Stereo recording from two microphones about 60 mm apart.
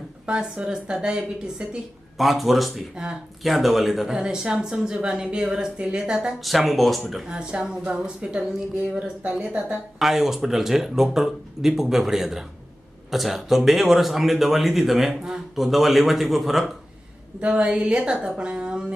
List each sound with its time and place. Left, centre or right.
0.3 s speech: centre
2.1 s speech: centre
2.9 s speech: centre
3.4 s speech: centre
6.4 s speech: centre
7.3 s speech: centre
9.5 s a woman's voice: right
10.0 s speech: centre
17.4 s speech: centre